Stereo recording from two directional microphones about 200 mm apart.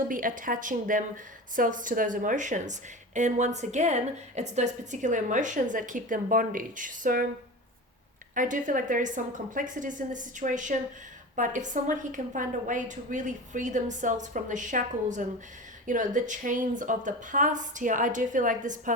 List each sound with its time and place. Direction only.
0.1 s a woman's voice: 40° right (ahead or behind)
8.4 s a woman's voice: 40° right (ahead or behind)